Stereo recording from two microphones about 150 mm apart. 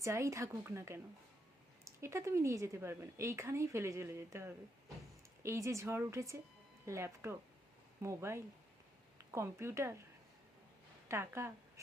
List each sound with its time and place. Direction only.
0.0 s a woman's voice: 20° right (ahead or behind)
11.1 s speech: 15° right (ahead or behind)